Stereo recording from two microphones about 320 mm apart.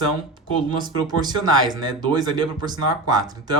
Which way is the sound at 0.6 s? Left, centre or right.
Centre.